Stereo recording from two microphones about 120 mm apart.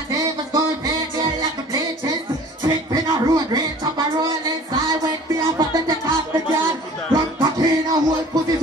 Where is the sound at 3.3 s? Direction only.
35° right (ahead or behind).